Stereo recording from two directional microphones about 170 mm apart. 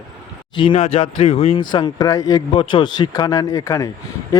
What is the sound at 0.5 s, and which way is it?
A man's voice, 30° left (ahead or behind).